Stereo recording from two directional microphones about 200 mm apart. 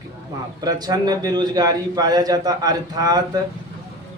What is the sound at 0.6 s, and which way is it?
A man's voice, 20° right (ahead or behind).